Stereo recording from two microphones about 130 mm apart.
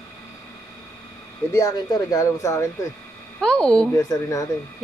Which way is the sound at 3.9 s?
25° left (ahead or behind).